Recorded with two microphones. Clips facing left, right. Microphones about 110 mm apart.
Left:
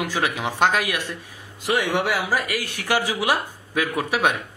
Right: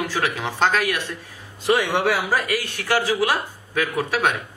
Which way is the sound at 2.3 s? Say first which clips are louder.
Right 2 dB; 15° left (ahead or behind).